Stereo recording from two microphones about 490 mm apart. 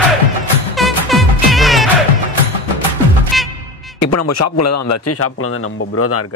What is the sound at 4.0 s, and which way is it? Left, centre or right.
A man's voice, left.